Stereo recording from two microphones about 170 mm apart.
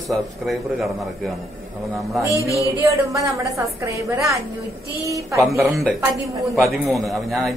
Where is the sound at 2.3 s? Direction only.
20° left (ahead or behind).